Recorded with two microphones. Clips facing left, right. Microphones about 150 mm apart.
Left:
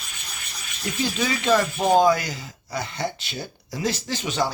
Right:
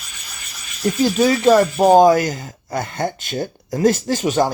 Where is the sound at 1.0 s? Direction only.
40° right (ahead or behind).